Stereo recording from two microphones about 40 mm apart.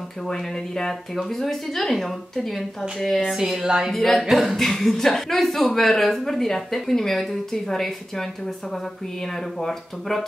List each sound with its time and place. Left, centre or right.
0.3 s a woman's voice: centre
3.3 s music: centre
3.9 s a woman's voice: centre
4.6 s speech: centre